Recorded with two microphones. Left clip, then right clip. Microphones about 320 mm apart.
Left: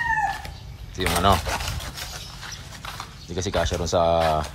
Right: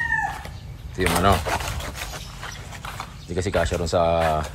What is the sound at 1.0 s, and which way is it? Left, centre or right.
Speech, centre.